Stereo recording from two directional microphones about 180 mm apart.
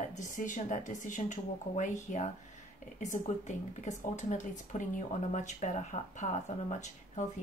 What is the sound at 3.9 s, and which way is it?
A woman's voice, 40° left (ahead or behind).